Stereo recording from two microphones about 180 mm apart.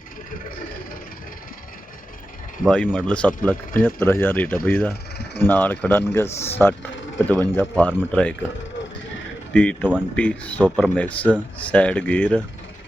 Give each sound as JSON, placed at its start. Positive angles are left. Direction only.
{"t": 2.6, "sound": "speech", "side_deg": 5}
{"t": 9.5, "sound": "speech", "side_deg": 5}